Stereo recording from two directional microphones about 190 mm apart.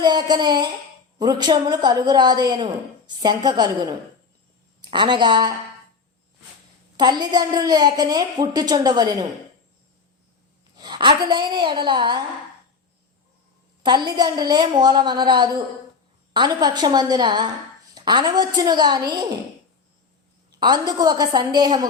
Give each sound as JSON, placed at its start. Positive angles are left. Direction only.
{"t": 0.0, "sound": "a woman's voice", "side_deg": -25}
{"t": 4.8, "sound": "a woman's voice", "side_deg": -25}
{"t": 6.9, "sound": "a woman's voice", "side_deg": -20}
{"t": 10.8, "sound": "a woman's voice", "side_deg": -25}
{"t": 13.8, "sound": "a woman's voice", "side_deg": -25}
{"t": 20.6, "sound": "a woman's voice", "side_deg": -20}